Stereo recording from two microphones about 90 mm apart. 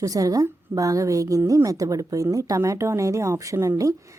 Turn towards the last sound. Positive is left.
turn(degrees=-35)  # may be behind; listen again after turning